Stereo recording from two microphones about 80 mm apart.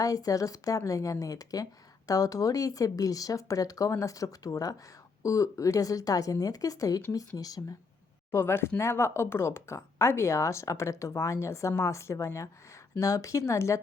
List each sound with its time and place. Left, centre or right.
0.0 s speech: left
8.3 s speech: left